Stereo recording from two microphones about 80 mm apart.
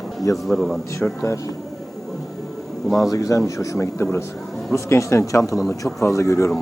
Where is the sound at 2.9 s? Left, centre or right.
Left.